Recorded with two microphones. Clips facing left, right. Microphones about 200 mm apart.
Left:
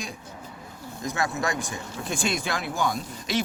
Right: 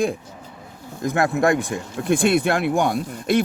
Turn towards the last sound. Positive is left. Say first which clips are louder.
# right 8 dB
turn(degrees=-55)  # may be behind; listen again after turning